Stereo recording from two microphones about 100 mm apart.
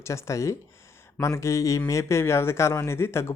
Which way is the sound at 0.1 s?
30° left (ahead or behind).